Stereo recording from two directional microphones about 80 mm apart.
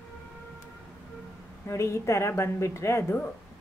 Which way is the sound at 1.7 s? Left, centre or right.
Left.